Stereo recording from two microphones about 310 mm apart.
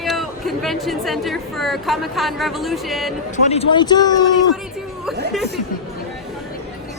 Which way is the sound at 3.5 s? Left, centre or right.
Centre.